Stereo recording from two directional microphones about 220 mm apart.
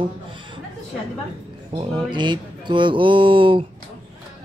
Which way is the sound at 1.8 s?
20° right (ahead or behind).